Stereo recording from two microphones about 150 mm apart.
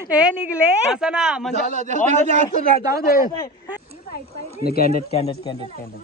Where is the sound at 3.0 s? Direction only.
90° left.